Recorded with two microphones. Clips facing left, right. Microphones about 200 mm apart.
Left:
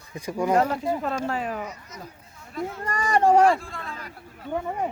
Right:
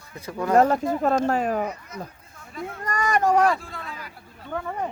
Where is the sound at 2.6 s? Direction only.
30° left (ahead or behind).